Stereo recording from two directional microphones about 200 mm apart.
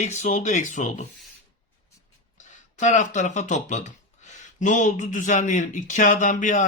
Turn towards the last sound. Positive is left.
turn(degrees=40)  # may be behind; listen again after turning